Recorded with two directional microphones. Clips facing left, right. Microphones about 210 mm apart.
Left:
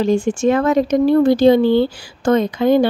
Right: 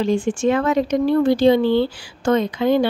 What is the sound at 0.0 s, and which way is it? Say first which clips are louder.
Speech: left 3 dB; 40° left (ahead or behind).